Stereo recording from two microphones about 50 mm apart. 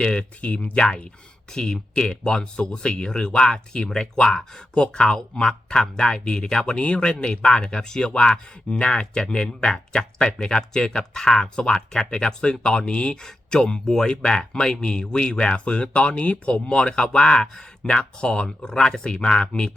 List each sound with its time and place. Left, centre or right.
0.0 s speech: centre
1.5 s speech: centre